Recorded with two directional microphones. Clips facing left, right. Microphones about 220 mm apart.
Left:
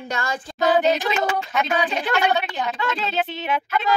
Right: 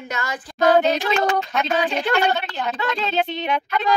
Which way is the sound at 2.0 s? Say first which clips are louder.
Right 1 dB; centre (ahead or behind).